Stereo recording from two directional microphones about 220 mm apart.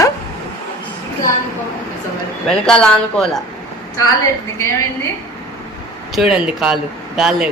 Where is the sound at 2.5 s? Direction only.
5° left (ahead or behind).